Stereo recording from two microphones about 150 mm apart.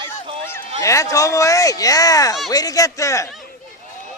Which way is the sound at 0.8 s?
20° left (ahead or behind).